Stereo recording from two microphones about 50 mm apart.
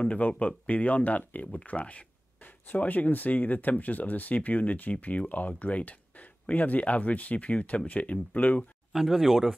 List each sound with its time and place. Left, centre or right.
0.0 s speech: left
8.9 s a man's voice: centre